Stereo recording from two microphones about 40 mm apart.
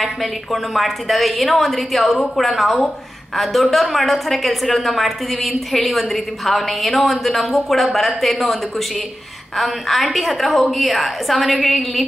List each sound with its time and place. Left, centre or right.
0.0 s a woman's voice: centre